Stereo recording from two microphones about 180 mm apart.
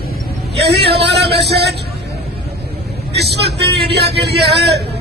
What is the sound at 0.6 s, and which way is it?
A man's voice, 65° right (ahead or behind).